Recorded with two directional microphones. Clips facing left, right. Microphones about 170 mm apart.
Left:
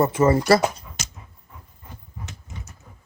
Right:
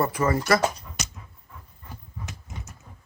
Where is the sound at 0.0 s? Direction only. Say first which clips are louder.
Left 6 dB; 25° left (ahead or behind).